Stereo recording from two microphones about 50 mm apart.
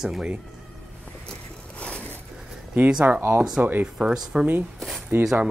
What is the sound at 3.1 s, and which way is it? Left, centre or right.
Speech, right.